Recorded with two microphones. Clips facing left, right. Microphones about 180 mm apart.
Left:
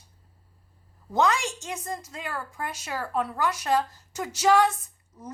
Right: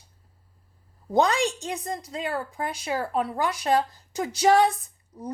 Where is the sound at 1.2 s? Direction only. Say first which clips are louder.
Right 1 dB; 35° right (ahead or behind).